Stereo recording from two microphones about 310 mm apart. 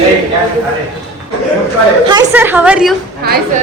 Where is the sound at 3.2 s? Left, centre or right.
Right.